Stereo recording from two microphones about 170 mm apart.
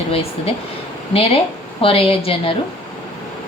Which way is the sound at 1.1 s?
35° left (ahead or behind).